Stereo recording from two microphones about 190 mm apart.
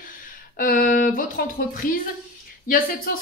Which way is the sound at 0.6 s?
45° left (ahead or behind).